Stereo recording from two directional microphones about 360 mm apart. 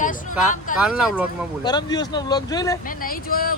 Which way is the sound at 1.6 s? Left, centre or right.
Centre.